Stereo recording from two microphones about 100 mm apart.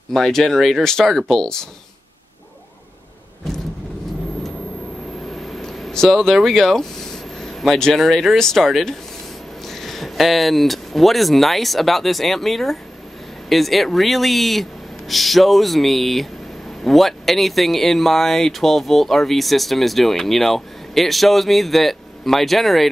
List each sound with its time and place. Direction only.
0.1 s speech: 5° left (ahead or behind)
5.3 s speech: centre (ahead or behind)